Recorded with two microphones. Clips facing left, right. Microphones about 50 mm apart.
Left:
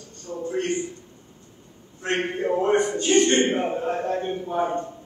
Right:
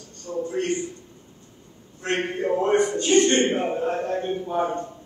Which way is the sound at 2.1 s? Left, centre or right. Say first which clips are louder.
Even; left.